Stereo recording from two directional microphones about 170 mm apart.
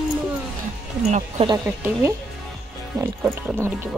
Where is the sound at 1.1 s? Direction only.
40° right (ahead or behind).